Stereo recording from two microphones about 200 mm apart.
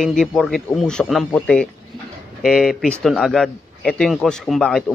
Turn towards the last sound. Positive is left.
turn(degrees=0)  # may be behind; listen again after turning